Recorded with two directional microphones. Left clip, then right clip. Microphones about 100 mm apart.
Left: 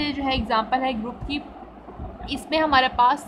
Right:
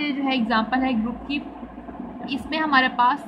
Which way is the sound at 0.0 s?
55° left (ahead or behind).